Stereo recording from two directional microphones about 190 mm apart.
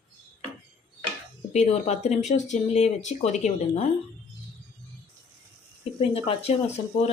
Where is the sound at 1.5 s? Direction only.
35° left (ahead or behind).